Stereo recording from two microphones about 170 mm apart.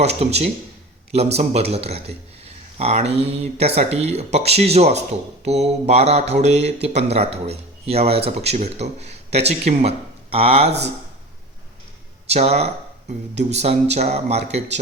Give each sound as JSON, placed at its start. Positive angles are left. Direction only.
{"t": 0.0, "sound": "speech", "side_deg": -40}
{"t": 10.7, "sound": "speech", "side_deg": -80}
{"t": 12.3, "sound": "speech", "side_deg": -40}